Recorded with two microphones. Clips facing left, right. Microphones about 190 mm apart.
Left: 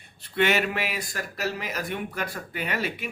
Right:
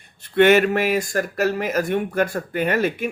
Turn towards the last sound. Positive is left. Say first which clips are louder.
# right 9 dB
turn(degrees=-50)  # may be behind; listen again after turning